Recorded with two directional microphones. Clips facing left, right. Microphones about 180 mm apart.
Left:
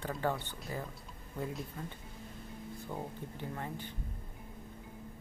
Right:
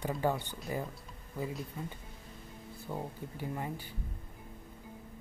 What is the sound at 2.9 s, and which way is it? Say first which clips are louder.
Speech: right 3 dB; 10° right (ahead or behind).